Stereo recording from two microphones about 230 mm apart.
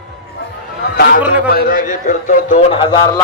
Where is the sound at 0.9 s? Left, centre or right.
Left.